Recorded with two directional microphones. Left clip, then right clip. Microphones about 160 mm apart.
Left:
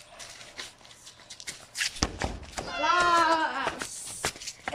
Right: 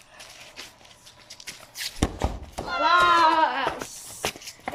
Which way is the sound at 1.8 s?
25° right (ahead or behind).